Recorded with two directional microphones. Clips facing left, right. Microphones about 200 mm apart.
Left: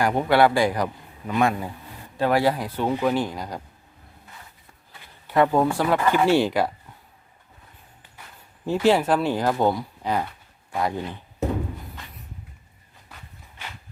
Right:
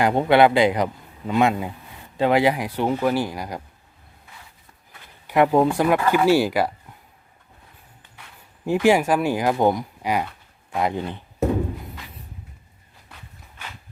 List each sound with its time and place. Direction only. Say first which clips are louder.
0.0 s speech: right 3 dB; 20° right (ahead or behind)
5.3 s speech: right 2 dB; 15° right (ahead or behind)
8.6 s speech: right 2 dB; 15° right (ahead or behind)